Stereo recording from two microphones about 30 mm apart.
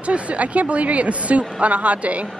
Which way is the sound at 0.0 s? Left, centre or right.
Right.